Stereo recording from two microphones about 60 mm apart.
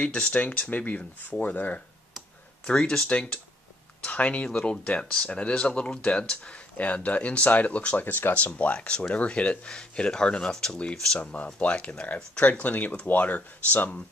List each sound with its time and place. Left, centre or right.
0.0 s speech: centre
2.6 s speech: centre